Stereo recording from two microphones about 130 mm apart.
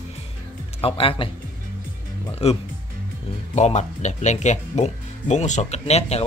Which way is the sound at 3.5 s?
60° left (ahead or behind).